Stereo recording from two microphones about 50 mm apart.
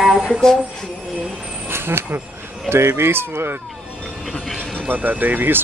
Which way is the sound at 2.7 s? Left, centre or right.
Right.